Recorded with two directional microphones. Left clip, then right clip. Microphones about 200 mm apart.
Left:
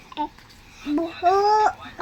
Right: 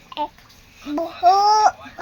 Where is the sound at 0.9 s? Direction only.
20° right (ahead or behind).